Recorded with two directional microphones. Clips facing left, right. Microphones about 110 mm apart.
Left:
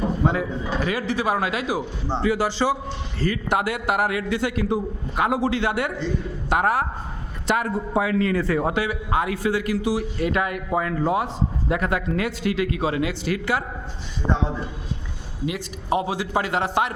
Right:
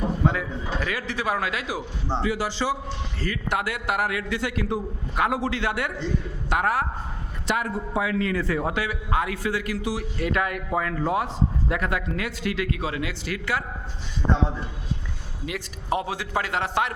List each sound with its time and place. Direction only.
0.3 s a man's voice: 20° left (ahead or behind)
2.2 s a man's voice: 45° left (ahead or behind)
3.2 s a man's voice: 25° left (ahead or behind)
7.4 s a man's voice: 40° left (ahead or behind)
8.7 s a man's voice: 20° left (ahead or behind)
11.7 s a man's voice: 30° left (ahead or behind)
15.4 s a man's voice: 5° left (ahead or behind)